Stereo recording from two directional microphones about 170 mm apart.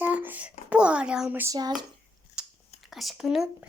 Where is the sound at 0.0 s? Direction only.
10° right (ahead or behind).